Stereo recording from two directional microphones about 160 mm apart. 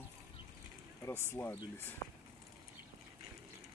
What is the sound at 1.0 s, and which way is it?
Speech, 15° left (ahead or behind).